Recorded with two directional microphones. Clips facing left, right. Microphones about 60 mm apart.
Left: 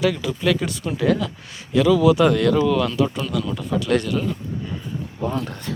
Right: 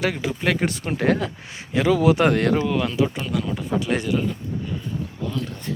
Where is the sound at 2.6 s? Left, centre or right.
Right.